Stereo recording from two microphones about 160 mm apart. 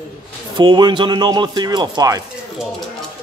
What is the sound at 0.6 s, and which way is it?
Speech, 25° right (ahead or behind).